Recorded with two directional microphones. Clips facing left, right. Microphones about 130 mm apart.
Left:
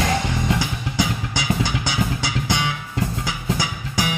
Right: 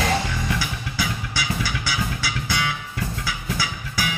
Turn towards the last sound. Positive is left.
turn(degrees=20)  # may be behind; listen again after turning